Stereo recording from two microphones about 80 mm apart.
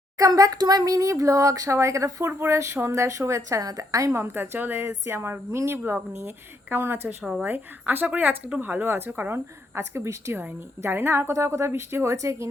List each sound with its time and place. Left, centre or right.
0.2 s a woman's voice: right